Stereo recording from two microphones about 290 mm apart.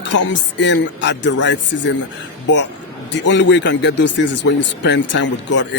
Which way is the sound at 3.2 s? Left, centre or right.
Left.